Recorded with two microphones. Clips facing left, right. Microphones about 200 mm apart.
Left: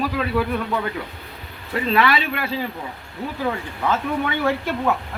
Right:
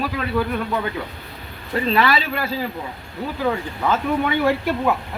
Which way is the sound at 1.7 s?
30° right (ahead or behind).